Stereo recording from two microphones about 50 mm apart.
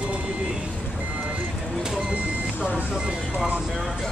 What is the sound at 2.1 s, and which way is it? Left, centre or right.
Vehicle, right.